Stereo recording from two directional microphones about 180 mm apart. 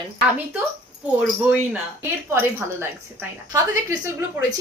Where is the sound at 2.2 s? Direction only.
10° right (ahead or behind).